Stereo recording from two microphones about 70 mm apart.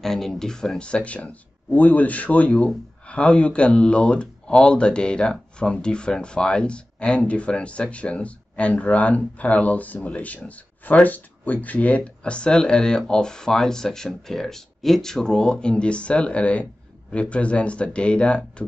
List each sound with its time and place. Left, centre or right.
0.0 s speech: centre